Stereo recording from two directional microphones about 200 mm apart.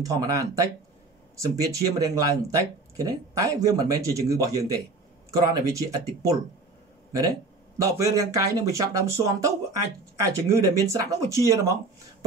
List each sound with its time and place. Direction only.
0.0 s speech: 15° right (ahead or behind)